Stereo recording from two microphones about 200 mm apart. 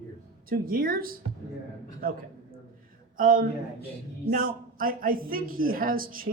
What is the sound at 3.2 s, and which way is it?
A man's voice, 45° right (ahead or behind).